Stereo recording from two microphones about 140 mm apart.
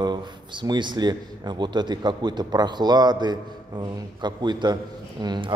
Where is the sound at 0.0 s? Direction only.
35° right (ahead or behind).